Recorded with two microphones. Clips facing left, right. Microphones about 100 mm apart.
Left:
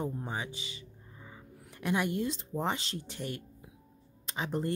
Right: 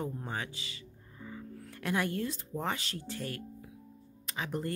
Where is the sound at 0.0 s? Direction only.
15° left (ahead or behind).